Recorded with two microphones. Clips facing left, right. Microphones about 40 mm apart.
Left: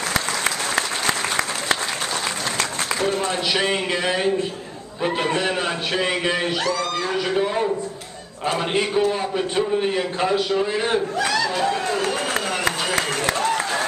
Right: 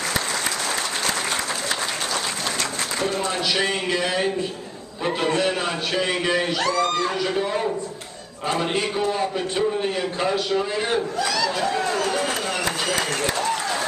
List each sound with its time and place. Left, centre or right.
3.0 s a man's voice: left
6.6 s speech: centre
7.3 s a man's voice: centre